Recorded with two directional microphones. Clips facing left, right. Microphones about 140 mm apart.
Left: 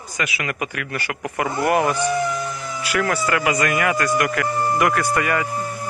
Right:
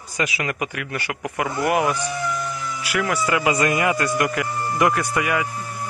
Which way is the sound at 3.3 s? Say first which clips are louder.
Right 3 dB; 25° right (ahead or behind).